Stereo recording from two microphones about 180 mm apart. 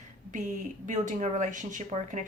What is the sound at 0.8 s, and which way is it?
A woman's voice, 45° right (ahead or behind).